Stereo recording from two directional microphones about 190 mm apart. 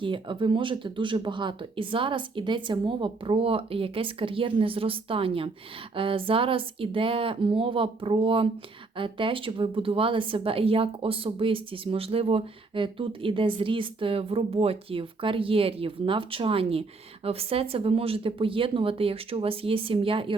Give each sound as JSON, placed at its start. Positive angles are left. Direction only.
{"t": 0.0, "sound": "a woman's voice", "side_deg": -25}